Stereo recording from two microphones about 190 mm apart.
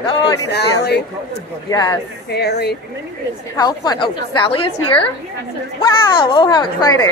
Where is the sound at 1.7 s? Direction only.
20° left (ahead or behind).